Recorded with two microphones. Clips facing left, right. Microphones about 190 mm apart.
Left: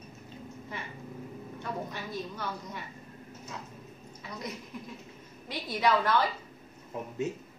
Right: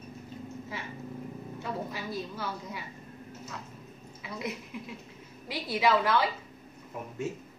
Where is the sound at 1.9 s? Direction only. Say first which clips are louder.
Right 1 dB; 5° right (ahead or behind).